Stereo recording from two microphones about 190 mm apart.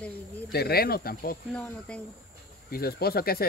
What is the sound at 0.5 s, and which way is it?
Speech, 55° left (ahead or behind).